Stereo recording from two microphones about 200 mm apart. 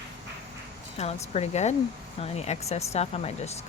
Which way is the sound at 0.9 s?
30° left (ahead or behind).